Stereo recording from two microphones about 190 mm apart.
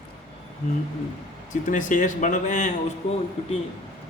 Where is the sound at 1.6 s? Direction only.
40° left (ahead or behind).